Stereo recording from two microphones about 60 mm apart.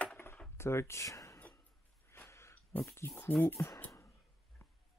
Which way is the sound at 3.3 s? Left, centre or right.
Left.